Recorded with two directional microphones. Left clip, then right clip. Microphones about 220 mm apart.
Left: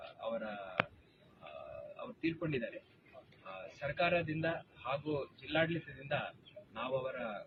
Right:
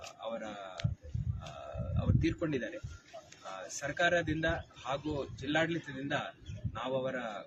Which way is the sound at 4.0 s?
15° right (ahead or behind).